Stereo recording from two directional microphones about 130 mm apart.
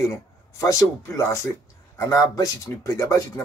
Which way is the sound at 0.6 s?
25° left (ahead or behind).